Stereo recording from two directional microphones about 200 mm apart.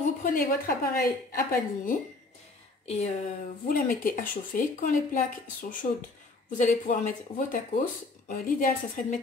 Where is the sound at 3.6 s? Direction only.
45° left (ahead or behind).